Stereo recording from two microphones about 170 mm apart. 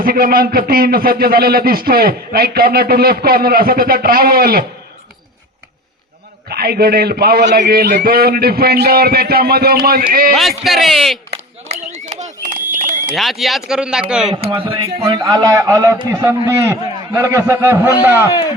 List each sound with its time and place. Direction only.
0.0 s a man's voice: 60° right (ahead or behind)
6.5 s a man's voice: 65° right (ahead or behind)
10.6 s speech: centre (ahead or behind)
11.3 s a sound: 40° right (ahead or behind)
13.1 s speech: centre (ahead or behind)
14.4 s a man's voice: 30° right (ahead or behind)
15.0 s a man's voice: 20° right (ahead or behind)